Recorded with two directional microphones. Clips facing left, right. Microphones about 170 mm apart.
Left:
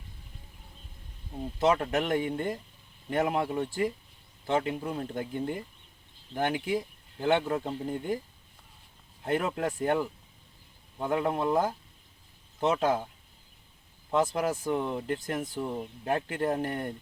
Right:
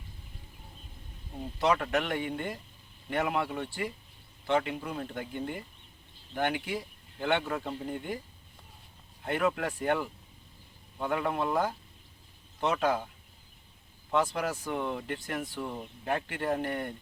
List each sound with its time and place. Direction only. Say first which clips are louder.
1.7 s speech: left 2 dB; 35° left (ahead or behind)
7.9 s speech: left 4 dB; 40° left (ahead or behind)
9.2 s speech: left 1 dB; 35° left (ahead or behind)
14.2 s speech: left 3 dB; 40° left (ahead or behind)